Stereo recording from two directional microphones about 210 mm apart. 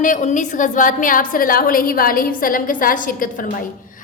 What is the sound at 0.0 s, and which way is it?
A woman's voice, 35° left (ahead or behind).